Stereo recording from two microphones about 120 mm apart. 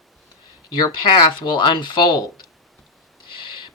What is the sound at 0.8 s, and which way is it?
Speech, 35° left (ahead or behind).